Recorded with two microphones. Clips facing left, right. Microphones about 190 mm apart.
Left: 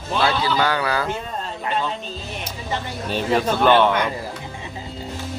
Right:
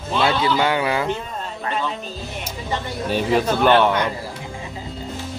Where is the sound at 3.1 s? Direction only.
10° right (ahead or behind).